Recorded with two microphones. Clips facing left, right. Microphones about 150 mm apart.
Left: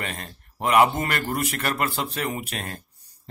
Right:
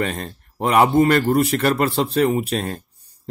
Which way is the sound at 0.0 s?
35° right (ahead or behind).